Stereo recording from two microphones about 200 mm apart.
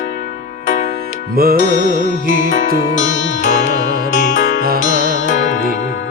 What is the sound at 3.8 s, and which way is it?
Music, 50° right (ahead or behind).